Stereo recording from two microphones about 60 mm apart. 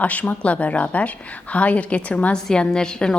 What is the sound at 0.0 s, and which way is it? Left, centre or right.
A woman's voice, left.